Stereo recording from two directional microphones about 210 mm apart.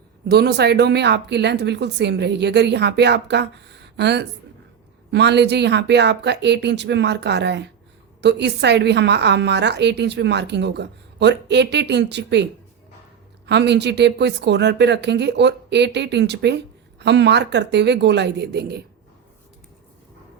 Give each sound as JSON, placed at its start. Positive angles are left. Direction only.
{"t": 0.3, "sound": "a woman's voice", "side_deg": -50}
{"t": 13.5, "sound": "a woman's voice", "side_deg": -55}